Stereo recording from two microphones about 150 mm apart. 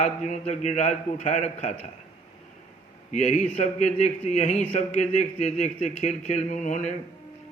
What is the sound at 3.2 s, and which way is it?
Speech, 5° left (ahead or behind).